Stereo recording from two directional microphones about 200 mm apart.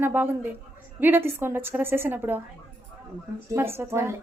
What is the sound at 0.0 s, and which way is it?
A woman's voice, 10° right (ahead or behind).